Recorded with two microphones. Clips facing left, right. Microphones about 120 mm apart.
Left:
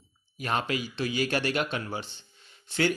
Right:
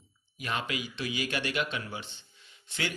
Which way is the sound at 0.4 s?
40° left (ahead or behind).